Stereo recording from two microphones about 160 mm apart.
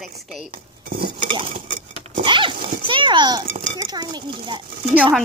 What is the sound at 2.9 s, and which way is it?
Speech, 30° right (ahead or behind).